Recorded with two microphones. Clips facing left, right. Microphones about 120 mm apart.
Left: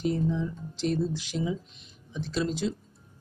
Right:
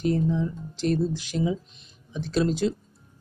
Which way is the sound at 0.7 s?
50° right (ahead or behind).